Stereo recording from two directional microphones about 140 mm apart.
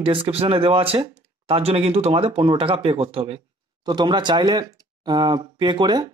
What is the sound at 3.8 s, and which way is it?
Speech, 30° right (ahead or behind).